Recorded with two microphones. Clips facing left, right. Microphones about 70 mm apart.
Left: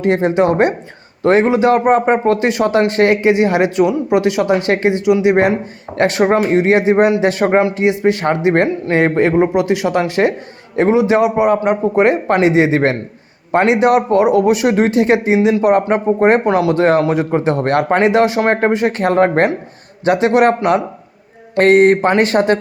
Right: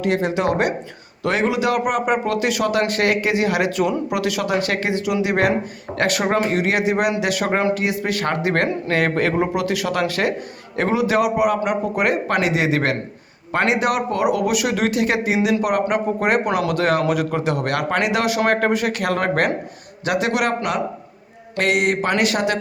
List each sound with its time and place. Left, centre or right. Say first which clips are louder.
0.0 s a man's voice: left 6 dB; left
21.6 s speech: left 10 dB; left